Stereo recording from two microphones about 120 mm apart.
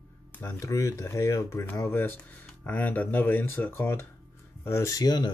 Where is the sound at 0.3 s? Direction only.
20° left (ahead or behind).